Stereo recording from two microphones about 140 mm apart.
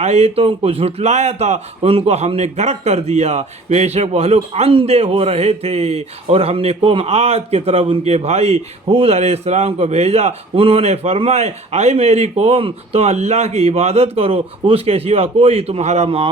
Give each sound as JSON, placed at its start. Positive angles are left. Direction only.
{"t": 0.0, "sound": "a man's voice", "side_deg": -50}
{"t": 16.0, "sound": "speech", "side_deg": -40}